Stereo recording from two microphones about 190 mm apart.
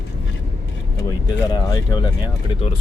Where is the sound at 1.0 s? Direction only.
20° left (ahead or behind).